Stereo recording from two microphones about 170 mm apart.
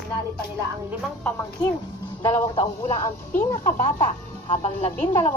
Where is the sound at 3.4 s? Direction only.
50° left (ahead or behind).